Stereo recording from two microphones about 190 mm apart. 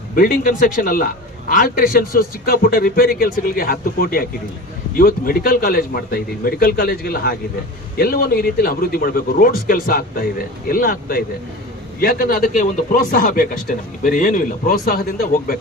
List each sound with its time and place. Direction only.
0.2 s speech: 50° left (ahead or behind)